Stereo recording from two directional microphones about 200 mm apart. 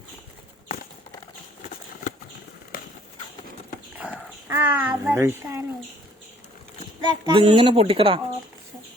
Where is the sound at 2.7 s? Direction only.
45° left (ahead or behind).